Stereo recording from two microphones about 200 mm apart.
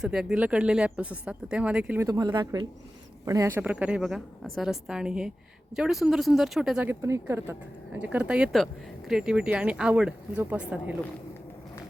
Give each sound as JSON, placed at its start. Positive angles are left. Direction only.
{"t": 0.0, "sound": "speech", "side_deg": -5}
{"t": 2.0, "sound": "speech", "side_deg": -20}